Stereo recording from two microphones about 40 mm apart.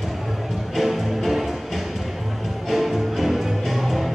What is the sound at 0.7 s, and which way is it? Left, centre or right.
Music, centre.